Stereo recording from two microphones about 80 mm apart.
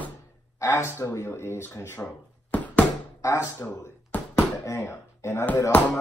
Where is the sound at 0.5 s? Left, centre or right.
Left.